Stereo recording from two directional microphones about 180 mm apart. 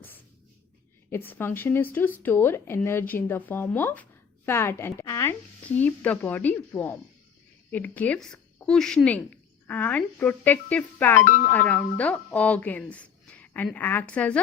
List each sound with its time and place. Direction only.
1.1 s speech: 10° left (ahead or behind)
11.3 s speech: 50° left (ahead or behind)
11.5 s speech: 10° left (ahead or behind)